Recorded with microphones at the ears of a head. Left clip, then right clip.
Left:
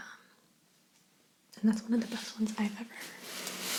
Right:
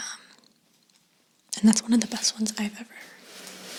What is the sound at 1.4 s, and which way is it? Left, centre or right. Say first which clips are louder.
Speech: right 10 dB; right.